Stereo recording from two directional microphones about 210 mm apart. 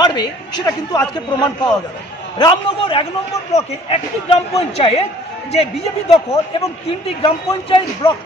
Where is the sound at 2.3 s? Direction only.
25° left (ahead or behind).